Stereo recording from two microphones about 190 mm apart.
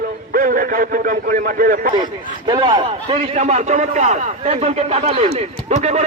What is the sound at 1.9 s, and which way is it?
A man's voice, 25° right (ahead or behind).